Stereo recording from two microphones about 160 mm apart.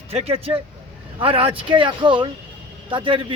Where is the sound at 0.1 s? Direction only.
40° right (ahead or behind).